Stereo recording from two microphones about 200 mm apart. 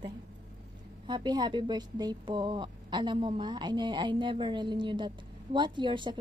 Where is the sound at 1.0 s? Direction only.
20° right (ahead or behind).